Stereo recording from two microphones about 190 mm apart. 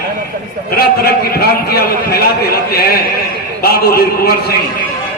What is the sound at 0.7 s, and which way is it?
A man's voice, 55° left (ahead or behind).